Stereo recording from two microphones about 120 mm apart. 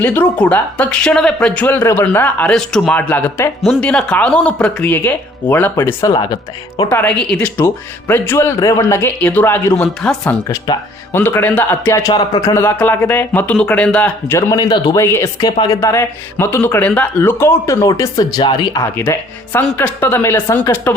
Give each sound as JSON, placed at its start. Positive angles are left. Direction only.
{"t": 0.0, "sound": "speech", "side_deg": 15}
{"t": 3.0, "sound": "speech", "side_deg": 15}
{"t": 6.9, "sound": "speech", "side_deg": 10}
{"t": 10.0, "sound": "speech", "side_deg": 5}
{"t": 11.1, "sound": "speech", "side_deg": 15}
{"t": 14.5, "sound": "speech", "side_deg": 35}
{"t": 14.9, "sound": "speech", "side_deg": 20}
{"t": 15.4, "sound": "speech", "side_deg": 35}
{"t": 19.7, "sound": "speech", "side_deg": 15}